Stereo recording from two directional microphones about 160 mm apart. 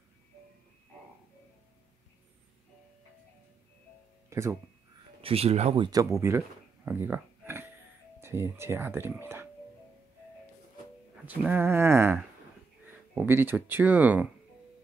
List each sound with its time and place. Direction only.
4.3 s speech: 20° right (ahead or behind)
5.2 s speech: 40° right (ahead or behind)
6.1 s a sound: 15° right (ahead or behind)
8.2 s speech: 15° right (ahead or behind)
11.2 s speech: 10° right (ahead or behind)